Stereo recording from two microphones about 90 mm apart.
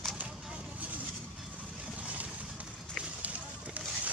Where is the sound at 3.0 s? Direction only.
15° right (ahead or behind).